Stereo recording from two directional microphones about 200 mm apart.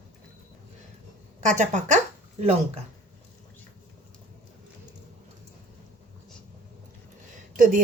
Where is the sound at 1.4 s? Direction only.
35° right (ahead or behind).